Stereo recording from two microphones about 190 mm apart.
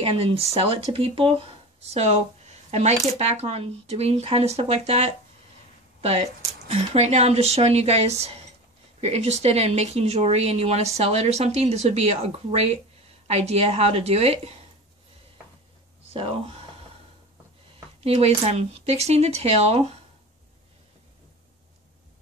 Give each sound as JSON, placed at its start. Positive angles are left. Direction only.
{"t": 0.0, "sound": "speech", "side_deg": -30}
{"t": 16.1, "sound": "speech", "side_deg": -30}
{"t": 18.0, "sound": "speech", "side_deg": -35}